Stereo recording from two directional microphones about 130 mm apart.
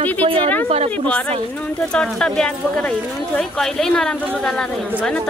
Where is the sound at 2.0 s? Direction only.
5° left (ahead or behind).